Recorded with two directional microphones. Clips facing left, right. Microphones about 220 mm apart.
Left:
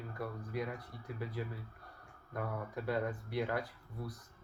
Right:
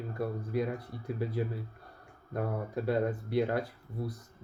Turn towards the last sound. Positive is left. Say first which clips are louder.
# right 6 dB
turn(degrees=-25)  # may be behind; listen again after turning